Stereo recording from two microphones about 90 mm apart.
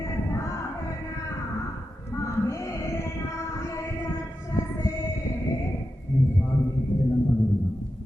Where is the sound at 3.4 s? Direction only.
35° left (ahead or behind).